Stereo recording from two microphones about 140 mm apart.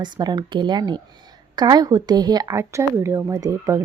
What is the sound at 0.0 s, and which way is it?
Speech, 30° right (ahead or behind).